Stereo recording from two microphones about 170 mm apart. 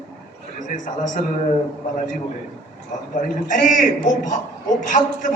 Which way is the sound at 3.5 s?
50° left (ahead or behind).